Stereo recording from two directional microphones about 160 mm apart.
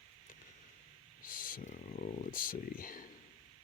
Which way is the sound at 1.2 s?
60° left (ahead or behind).